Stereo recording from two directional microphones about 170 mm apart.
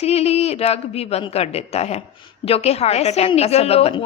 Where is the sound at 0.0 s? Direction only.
35° left (ahead or behind).